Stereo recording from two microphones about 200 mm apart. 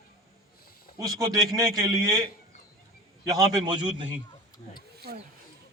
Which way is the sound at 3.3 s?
20° right (ahead or behind).